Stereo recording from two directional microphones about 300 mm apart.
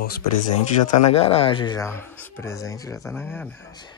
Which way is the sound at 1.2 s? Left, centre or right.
Centre.